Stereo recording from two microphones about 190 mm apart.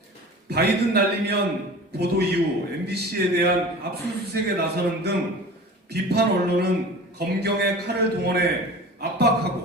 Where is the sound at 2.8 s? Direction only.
55° right (ahead or behind).